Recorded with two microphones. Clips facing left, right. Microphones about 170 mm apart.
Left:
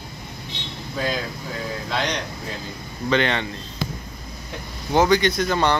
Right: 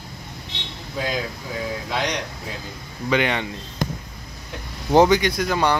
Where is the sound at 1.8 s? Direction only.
10° right (ahead or behind).